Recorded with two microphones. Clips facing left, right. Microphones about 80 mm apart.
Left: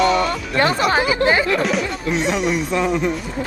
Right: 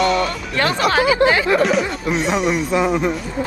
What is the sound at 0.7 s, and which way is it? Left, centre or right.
Speech, centre.